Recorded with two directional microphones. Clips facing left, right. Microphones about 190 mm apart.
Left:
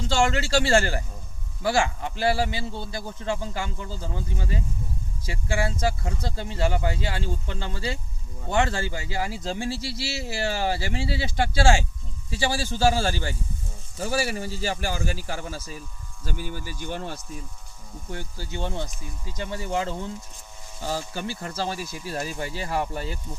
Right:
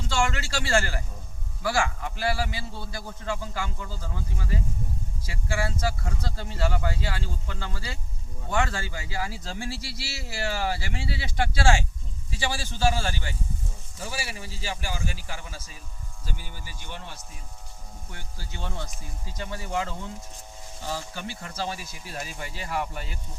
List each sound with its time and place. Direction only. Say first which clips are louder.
0.1 s speech: left 5 dB; 30° left (ahead or behind)
16.2 s speech: left 9 dB; 50° left (ahead or behind)
18.1 s speech: left 10 dB; 30° left (ahead or behind)